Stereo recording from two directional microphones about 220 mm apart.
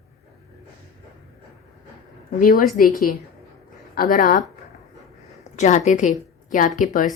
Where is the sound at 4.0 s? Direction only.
40° left (ahead or behind).